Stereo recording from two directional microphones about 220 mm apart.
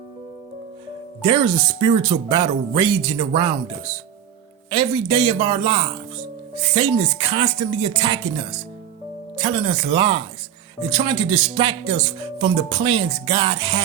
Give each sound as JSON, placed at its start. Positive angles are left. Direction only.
{"t": 1.2, "sound": "speech", "side_deg": -25}
{"t": 4.7, "sound": "speech", "side_deg": -20}